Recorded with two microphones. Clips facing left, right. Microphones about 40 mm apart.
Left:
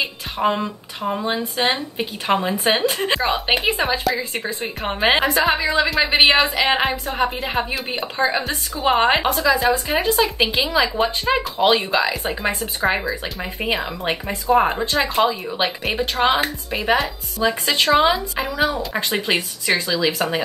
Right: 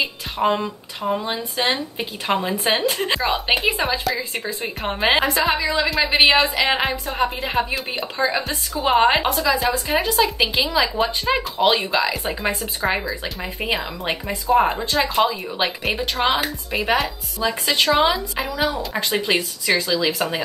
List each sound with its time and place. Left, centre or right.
0.0 s a sound: centre
0.6 s a woman's voice: centre
2.3 s a woman's voice: centre
5.3 s a woman's voice: centre
8.2 s speech: left
8.8 s a woman's voice: centre
12.8 s a woman's voice: centre
18.9 s speech: left
19.2 s a woman's voice: centre